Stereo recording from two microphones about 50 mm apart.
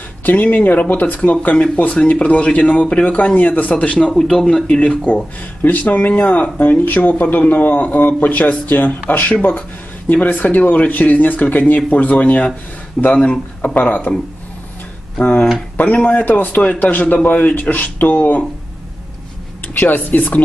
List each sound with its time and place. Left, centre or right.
0.2 s speech: left
3.7 s speech: left
4.2 s speech: centre
4.5 s speech: centre
15.8 s speech: left
19.7 s speech: left